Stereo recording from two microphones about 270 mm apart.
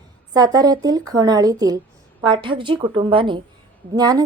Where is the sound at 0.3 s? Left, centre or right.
Centre.